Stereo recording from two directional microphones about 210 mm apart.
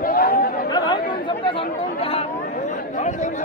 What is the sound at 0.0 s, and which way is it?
Chatter, 45° left (ahead or behind).